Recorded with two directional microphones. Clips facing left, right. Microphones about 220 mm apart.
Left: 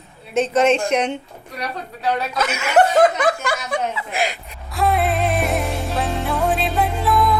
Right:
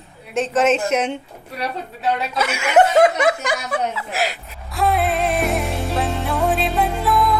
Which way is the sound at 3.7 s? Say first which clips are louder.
Even; 5° right (ahead or behind).